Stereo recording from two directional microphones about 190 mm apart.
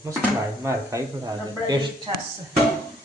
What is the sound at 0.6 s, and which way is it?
Speech, 15° right (ahead or behind).